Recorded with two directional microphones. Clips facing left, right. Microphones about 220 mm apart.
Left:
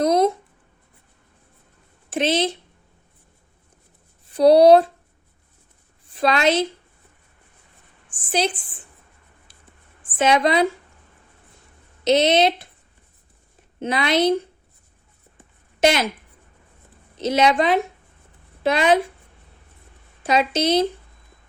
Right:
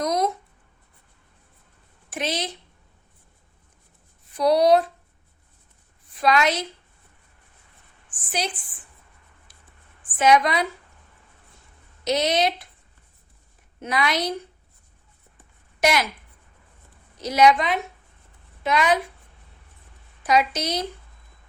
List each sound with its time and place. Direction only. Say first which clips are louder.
0.0 s a sound: left 6 dB; 30° left (ahead or behind)
2.0 s speech: left 8 dB; 25° left (ahead or behind)
4.4 s speech: left 6 dB; 30° left (ahead or behind)
6.1 s speech: left 3 dB; 30° left (ahead or behind)
9.5 s writing: left 2 dB; 30° left (ahead or behind)
10.2 s speech: left 2 dB; 25° left (ahead or behind)
12.0 s speech: left 5 dB; 25° left (ahead or behind)
13.7 s speech: left 5 dB; 25° left (ahead or behind)
15.8 s speech: left 4 dB; 25° left (ahead or behind)
17.2 s speech: even; 25° left (ahead or behind)
20.2 s speech: left 3 dB; 25° left (ahead or behind)